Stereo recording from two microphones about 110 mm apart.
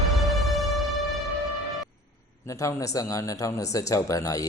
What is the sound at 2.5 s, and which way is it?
Speech, 30° left (ahead or behind).